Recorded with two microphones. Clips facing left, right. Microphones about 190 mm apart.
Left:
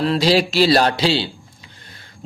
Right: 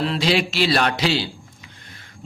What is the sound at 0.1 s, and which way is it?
A man's voice, 35° left (ahead or behind).